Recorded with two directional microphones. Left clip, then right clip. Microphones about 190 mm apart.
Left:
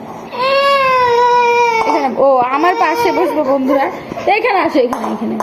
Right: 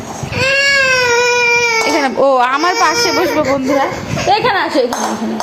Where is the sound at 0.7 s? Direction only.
25° right (ahead or behind).